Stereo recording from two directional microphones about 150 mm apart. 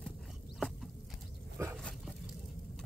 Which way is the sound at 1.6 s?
15° right (ahead or behind).